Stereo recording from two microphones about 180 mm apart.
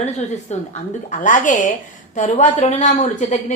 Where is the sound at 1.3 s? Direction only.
45° left (ahead or behind).